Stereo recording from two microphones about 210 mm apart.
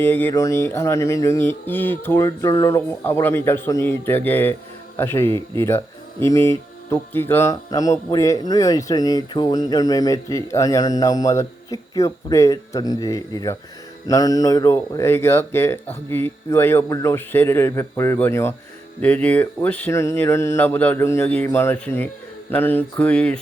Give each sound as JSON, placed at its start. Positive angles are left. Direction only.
{"t": 0.0, "sound": "speech", "side_deg": 10}